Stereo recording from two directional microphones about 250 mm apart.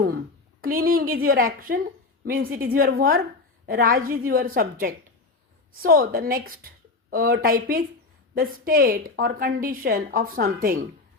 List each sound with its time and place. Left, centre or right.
0.6 s a woman's voice: right